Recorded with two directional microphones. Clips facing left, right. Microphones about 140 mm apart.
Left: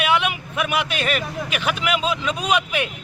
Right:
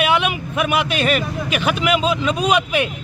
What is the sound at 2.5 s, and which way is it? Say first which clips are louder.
Speech: right 4 dB; 30° right (ahead or behind).